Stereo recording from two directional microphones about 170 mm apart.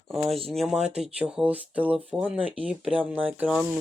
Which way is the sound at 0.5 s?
5° right (ahead or behind).